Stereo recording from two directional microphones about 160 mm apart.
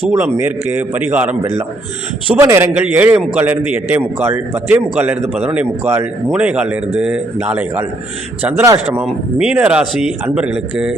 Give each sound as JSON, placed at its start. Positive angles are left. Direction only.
{"t": 0.2, "sound": "a man's voice", "side_deg": -10}
{"t": 2.4, "sound": "a man's voice", "side_deg": -15}
{"t": 9.0, "sound": "a man's voice", "side_deg": -5}